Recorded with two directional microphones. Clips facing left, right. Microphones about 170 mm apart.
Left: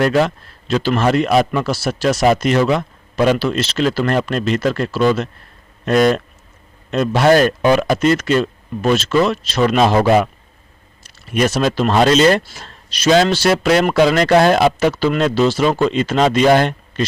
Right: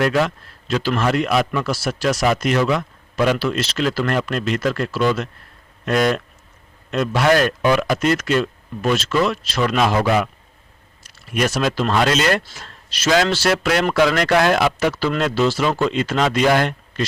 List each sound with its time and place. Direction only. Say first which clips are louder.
0.0 s a man's voice: left 3 dB; 30° left (ahead or behind)